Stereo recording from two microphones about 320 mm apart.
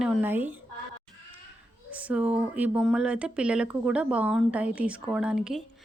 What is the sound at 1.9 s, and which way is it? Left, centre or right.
Speech, centre.